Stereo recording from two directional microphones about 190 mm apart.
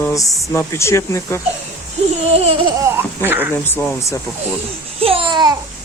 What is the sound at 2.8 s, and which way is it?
Speech, 10° right (ahead or behind).